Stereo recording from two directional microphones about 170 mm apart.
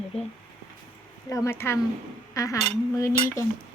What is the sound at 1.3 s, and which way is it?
A woman's voice, 15° left (ahead or behind).